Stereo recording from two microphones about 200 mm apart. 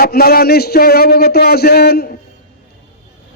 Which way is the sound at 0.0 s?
50° left (ahead or behind).